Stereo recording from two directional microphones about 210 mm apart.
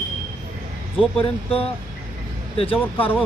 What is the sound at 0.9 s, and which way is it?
Speech, 5° right (ahead or behind).